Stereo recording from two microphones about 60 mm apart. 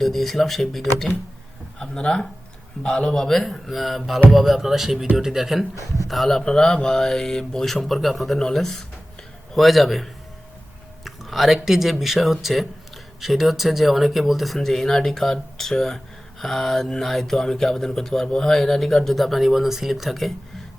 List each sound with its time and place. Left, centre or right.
0.0 s speech: centre
1.8 s speech: centre
5.7 s speech: left
6.1 s speech: centre
6.4 s speech: centre